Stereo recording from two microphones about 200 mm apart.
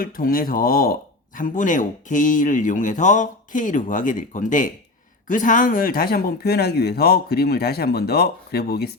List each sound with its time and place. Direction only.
0.0 s speech: 45° left (ahead or behind)